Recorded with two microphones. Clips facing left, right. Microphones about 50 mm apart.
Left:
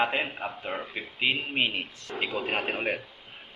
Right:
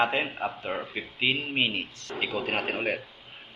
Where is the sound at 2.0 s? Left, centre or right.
Centre.